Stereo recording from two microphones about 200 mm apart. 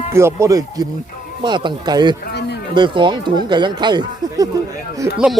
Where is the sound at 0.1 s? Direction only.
15° right (ahead or behind).